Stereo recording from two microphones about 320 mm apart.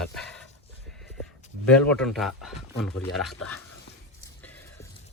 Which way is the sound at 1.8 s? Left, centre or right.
Centre.